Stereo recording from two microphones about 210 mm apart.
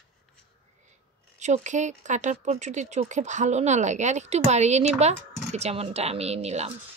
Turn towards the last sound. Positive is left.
turn(degrees=-30)  # may be behind; listen again after turning